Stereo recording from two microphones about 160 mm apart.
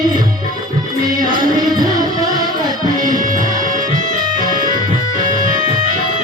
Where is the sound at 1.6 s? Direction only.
25° right (ahead or behind).